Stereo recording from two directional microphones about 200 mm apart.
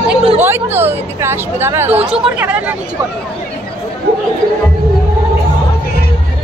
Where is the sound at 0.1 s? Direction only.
10° right (ahead or behind).